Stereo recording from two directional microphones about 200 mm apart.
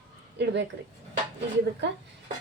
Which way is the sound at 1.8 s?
60° right (ahead or behind).